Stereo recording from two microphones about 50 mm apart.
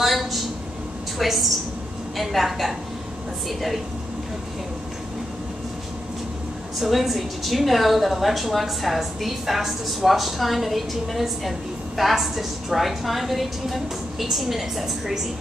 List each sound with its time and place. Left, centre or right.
0.0 s a sound: centre
1.1 s a woman's voice: centre
6.8 s a woman's voice: centre